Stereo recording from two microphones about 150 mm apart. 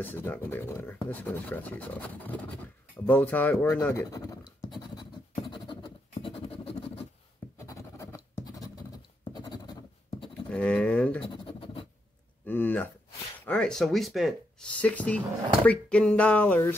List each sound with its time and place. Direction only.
0.0 s speech: 10° left (ahead or behind)
5.3 s scratch: 35° left (ahead or behind)
7.5 s scratch: 20° left (ahead or behind)
10.5 s pigeon: 5° left (ahead or behind)
11.2 s scratch: 35° left (ahead or behind)
12.4 s a sound: 15° left (ahead or behind)
13.5 s speech: 5° left (ahead or behind)